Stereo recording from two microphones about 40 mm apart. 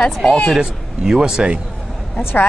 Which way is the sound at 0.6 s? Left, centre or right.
Centre.